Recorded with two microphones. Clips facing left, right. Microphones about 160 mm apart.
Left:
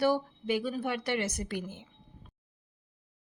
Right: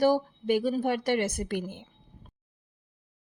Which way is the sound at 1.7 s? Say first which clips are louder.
Right 3 dB; 55° right (ahead or behind).